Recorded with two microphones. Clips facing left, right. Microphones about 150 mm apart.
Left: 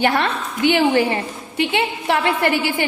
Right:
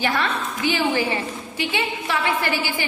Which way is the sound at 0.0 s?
65° left (ahead or behind).